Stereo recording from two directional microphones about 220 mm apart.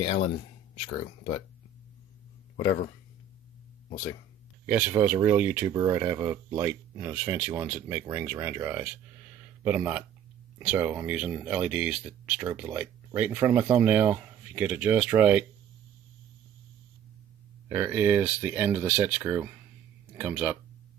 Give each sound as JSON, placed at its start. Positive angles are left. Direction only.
{"t": 2.6, "sound": "speech", "side_deg": 50}
{"t": 4.6, "sound": "speech", "side_deg": -10}
{"t": 17.6, "sound": "speech", "side_deg": -10}